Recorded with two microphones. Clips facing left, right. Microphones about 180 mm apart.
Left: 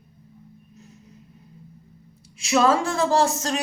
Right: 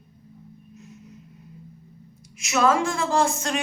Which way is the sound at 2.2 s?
30° left (ahead or behind).